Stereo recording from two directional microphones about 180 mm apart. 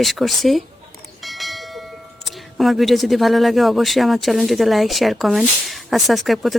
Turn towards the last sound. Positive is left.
turn(degrees=0)  # may be behind; listen again after turning